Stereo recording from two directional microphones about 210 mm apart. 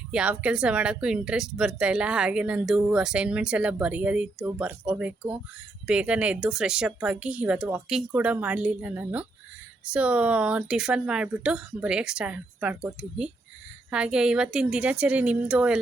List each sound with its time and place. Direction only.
0.1 s a woman's voice: 5° right (ahead or behind)